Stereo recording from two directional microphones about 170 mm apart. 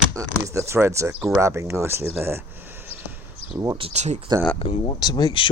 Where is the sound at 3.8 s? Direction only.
40° right (ahead or behind).